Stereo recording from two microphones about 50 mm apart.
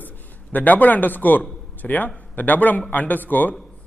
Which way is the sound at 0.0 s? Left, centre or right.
Left.